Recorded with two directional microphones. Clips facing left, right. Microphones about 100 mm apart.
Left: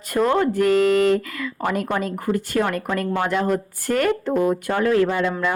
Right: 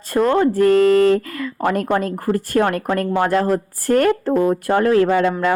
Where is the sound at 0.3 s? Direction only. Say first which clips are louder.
Right 6 dB; 35° right (ahead or behind).